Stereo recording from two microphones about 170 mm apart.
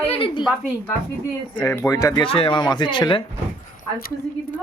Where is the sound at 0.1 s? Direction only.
35° left (ahead or behind).